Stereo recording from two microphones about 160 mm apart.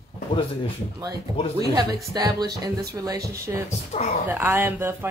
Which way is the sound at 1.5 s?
25° right (ahead or behind).